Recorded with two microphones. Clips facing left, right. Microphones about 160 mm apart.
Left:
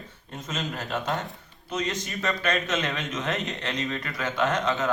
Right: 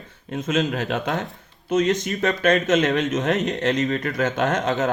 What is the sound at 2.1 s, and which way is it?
Speech, 65° right (ahead or behind).